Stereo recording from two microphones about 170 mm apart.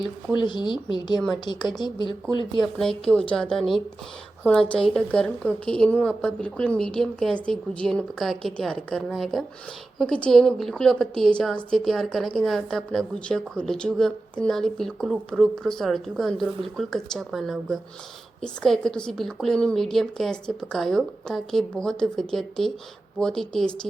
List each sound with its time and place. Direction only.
0.3 s speech: 25° left (ahead or behind)
2.7 s a woman's voice: 5° left (ahead or behind)